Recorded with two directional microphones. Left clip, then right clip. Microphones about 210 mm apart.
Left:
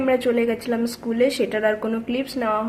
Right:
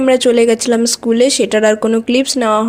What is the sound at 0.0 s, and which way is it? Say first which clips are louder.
Speech: right 10 dB; 45° right (ahead or behind).